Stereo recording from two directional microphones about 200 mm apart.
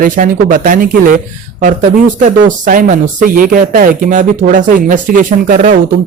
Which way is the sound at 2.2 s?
40° right (ahead or behind).